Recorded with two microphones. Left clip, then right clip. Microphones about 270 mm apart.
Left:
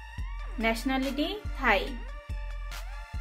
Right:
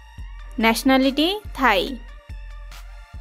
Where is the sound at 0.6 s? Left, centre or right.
Right.